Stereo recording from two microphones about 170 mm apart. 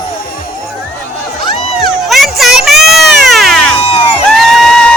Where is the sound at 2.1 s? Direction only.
Centre (ahead or behind).